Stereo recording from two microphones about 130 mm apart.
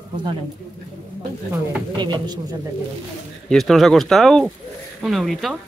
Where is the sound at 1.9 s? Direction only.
35° right (ahead or behind).